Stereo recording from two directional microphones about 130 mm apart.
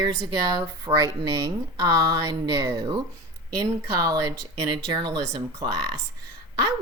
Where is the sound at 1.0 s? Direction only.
25° right (ahead or behind).